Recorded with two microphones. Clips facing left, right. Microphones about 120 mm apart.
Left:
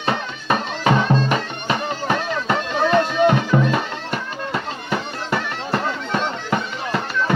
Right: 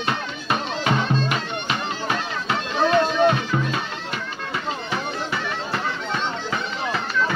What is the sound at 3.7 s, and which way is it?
Music, 50° left (ahead or behind).